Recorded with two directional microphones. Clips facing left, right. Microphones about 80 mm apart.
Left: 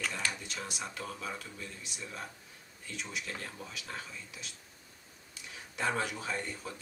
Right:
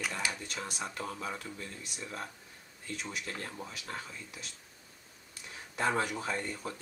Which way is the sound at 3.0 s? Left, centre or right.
Right.